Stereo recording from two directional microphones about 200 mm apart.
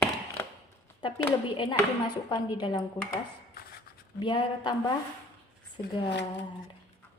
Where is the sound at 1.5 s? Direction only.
25° left (ahead or behind).